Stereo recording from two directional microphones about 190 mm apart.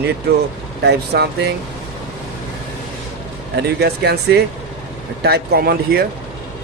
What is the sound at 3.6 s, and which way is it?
Speech, 60° right (ahead or behind).